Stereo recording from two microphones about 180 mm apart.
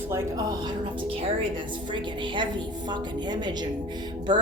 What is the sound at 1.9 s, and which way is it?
A woman's voice, 25° right (ahead or behind).